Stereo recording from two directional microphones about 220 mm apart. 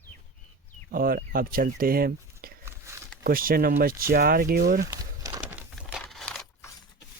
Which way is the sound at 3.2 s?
40° right (ahead or behind).